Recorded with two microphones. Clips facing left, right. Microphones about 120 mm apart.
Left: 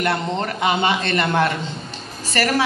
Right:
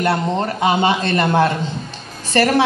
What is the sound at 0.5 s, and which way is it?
A man's voice, 35° right (ahead or behind).